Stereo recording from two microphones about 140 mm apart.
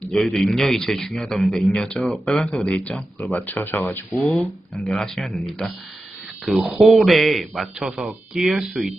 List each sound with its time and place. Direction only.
0.1 s a man's voice: centre (ahead or behind); by 4.3 s 15° left (ahead or behind)
4.9 s a man's voice: centre (ahead or behind)